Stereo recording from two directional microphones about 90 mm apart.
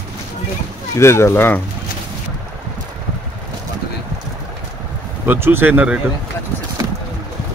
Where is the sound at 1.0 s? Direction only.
30° left (ahead or behind).